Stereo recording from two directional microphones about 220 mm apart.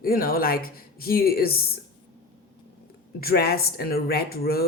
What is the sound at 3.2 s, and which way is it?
Speech, 45° left (ahead or behind).